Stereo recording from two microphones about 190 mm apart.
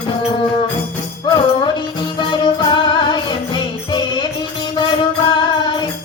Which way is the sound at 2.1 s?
25° left (ahead or behind).